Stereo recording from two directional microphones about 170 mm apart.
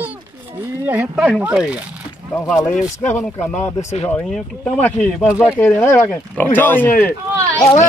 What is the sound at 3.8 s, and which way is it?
Speech, 40° left (ahead or behind).